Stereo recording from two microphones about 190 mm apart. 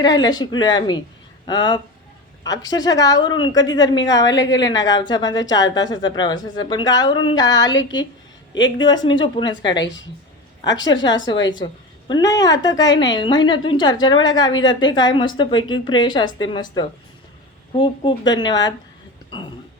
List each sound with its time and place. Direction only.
0.0 s speech: 20° left (ahead or behind)
4.3 s a woman's voice: 70° left (ahead or behind)
4.9 s speech: 20° left (ahead or behind)
8.8 s speech: 20° left (ahead or behind)
10.7 s a woman's voice: 75° left (ahead or behind)
10.9 s a woman's voice: 20° left (ahead or behind)